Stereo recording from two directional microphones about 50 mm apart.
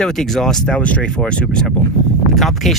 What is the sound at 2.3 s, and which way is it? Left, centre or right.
Speech, centre.